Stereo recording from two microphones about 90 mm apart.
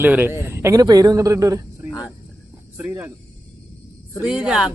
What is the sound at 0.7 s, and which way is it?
Speech, 45° right (ahead or behind).